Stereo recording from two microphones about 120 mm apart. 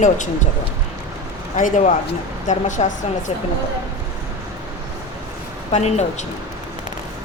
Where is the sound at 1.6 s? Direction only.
85° left.